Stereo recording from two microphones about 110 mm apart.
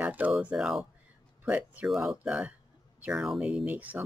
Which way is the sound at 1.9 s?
Centre (ahead or behind).